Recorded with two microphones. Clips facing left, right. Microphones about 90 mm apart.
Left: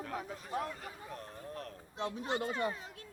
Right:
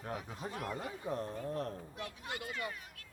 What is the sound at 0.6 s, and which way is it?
Speech, 25° right (ahead or behind).